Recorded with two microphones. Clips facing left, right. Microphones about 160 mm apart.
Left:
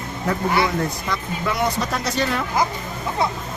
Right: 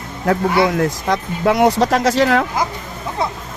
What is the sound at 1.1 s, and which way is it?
Speech, 90° right.